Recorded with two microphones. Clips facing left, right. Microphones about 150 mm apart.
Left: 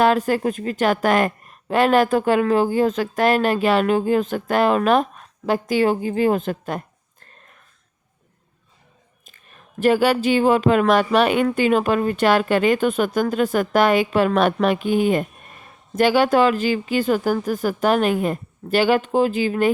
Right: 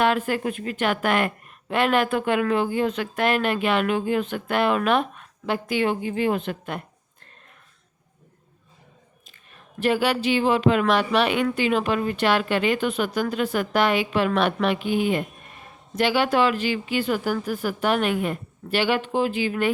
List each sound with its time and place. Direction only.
0.0 s a woman's voice: 40° left (ahead or behind)
9.8 s a woman's voice: 45° left (ahead or behind)